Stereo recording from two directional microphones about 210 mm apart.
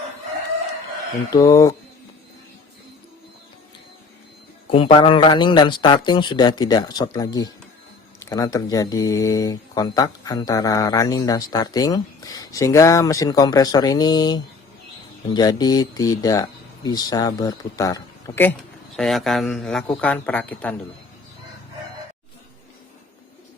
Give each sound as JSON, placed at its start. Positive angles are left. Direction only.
{"t": 1.3, "sound": "speech", "side_deg": 15}
{"t": 4.7, "sound": "a man's voice", "side_deg": 25}
{"t": 18.9, "sound": "a man's voice", "side_deg": 0}